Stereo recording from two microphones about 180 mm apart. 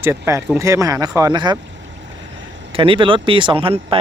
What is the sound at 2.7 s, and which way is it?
Speech, 30° right (ahead or behind).